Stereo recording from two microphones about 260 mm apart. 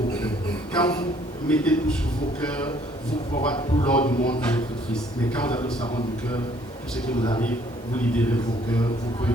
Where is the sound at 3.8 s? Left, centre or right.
Centre.